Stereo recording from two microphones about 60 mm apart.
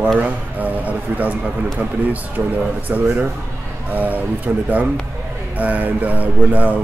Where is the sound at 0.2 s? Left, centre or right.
Right.